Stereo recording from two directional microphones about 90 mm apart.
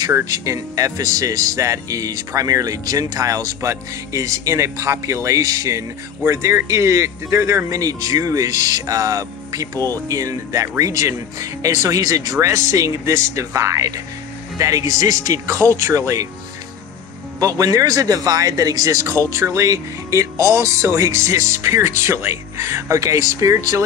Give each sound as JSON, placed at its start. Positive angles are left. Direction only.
{"t": 0.1, "sound": "speech", "side_deg": -35}
{"t": 17.4, "sound": "speech", "side_deg": -40}